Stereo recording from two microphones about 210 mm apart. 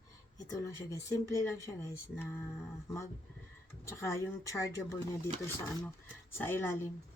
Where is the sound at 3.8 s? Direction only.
15° left (ahead or behind).